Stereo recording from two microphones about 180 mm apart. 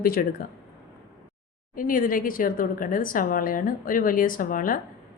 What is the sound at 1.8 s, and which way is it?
A woman's voice, 50° left (ahead or behind).